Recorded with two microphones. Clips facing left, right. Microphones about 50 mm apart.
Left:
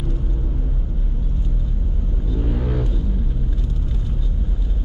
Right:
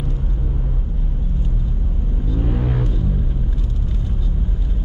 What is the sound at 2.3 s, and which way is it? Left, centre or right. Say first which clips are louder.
Vehicle: right 1 dB; centre.